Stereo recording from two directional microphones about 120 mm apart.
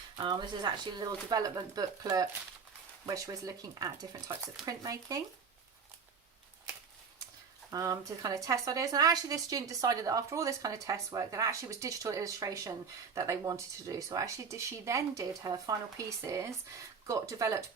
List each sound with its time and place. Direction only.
0.2 s a woman's voice: 40° right (ahead or behind)
7.7 s a woman's voice: 30° right (ahead or behind)